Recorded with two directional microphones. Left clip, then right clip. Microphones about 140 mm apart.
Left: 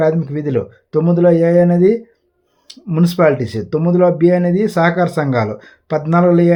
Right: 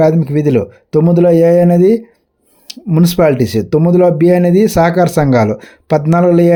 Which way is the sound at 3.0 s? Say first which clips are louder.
Right 2 dB; 45° right (ahead or behind).